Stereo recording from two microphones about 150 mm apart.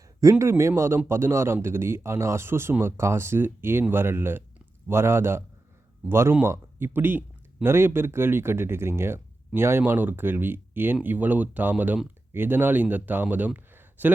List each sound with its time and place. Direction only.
0.2 s speech: 20° right (ahead or behind)